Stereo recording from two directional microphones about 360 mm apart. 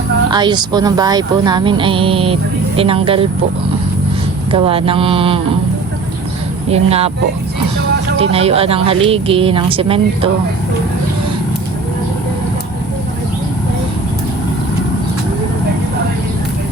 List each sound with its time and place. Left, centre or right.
0.3 s speech: centre
4.5 s speech: centre
6.7 s speech: centre
8.2 s speech: centre